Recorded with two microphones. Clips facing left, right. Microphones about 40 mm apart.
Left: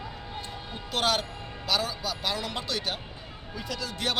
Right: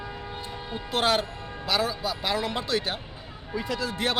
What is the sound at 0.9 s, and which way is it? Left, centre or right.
Speech, centre.